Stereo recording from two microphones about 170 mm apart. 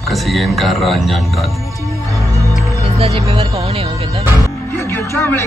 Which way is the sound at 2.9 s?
35° right (ahead or behind).